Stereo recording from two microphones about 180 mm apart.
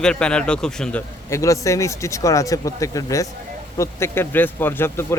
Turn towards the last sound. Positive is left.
turn(degrees=15)  # may be behind; listen again after turning